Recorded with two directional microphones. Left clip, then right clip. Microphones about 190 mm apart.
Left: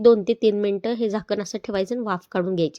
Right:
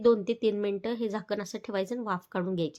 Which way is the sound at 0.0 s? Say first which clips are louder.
Left 8 dB; 30° left (ahead or behind).